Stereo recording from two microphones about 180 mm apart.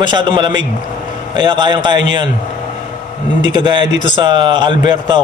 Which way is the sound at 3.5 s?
25° right (ahead or behind).